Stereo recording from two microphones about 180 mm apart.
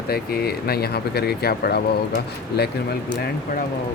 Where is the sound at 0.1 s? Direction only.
60° left (ahead or behind).